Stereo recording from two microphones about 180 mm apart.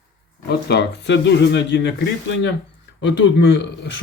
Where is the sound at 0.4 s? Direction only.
65° left (ahead or behind).